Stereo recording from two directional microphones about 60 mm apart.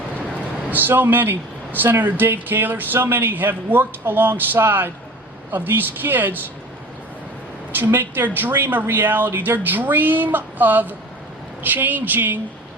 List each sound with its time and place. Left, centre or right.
0.7 s speech: right
7.7 s speech: right